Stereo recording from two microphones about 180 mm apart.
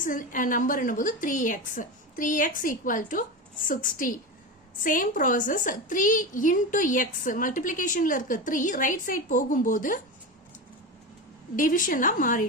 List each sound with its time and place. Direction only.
0.0 s a woman's voice: 50° left (ahead or behind)
11.5 s a woman's voice: 50° left (ahead or behind)